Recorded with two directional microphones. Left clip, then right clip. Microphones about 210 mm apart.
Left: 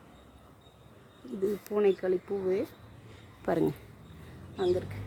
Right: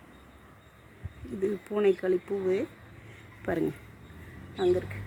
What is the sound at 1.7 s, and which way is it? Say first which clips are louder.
Speech: right 1 dB; 10° right (ahead or behind).